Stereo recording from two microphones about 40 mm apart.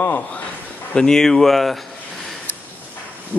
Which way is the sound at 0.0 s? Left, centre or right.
Left.